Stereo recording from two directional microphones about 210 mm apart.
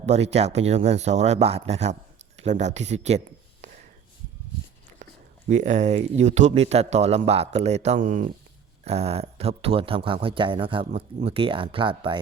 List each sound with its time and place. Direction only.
0.0 s speech: 30° right (ahead or behind)
5.5 s speech: 35° right (ahead or behind)